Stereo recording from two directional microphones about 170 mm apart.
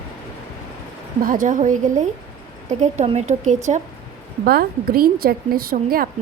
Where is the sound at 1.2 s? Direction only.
50° right (ahead or behind).